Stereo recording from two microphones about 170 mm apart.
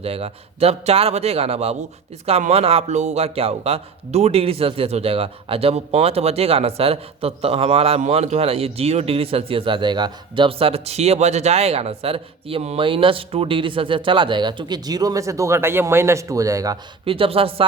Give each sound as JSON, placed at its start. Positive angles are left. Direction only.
{"t": 0.0, "sound": "a man's voice", "side_deg": -35}
{"t": 17.1, "sound": "a man's voice", "side_deg": -35}